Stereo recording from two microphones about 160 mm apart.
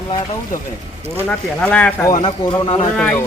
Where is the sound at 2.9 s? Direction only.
5° left (ahead or behind).